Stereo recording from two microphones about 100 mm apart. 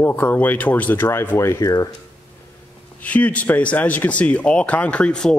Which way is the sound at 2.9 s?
15° left (ahead or behind).